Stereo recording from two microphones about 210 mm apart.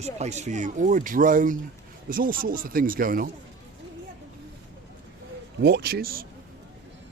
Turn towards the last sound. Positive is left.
turn(degrees=-45)  # may be behind; listen again after turning